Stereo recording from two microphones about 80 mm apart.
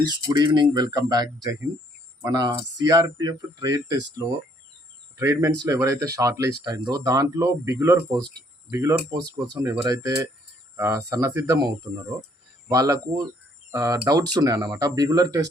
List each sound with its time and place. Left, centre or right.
0.0 s speech: right
2.7 s speech: right
6.7 s speech: right
10.8 s speech: right
11.1 s speech: right